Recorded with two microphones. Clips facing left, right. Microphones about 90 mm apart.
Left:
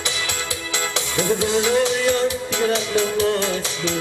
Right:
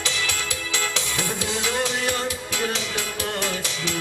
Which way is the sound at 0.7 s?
20° left (ahead or behind).